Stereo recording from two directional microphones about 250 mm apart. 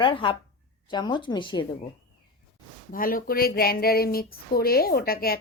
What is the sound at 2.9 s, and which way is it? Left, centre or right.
Speech, left.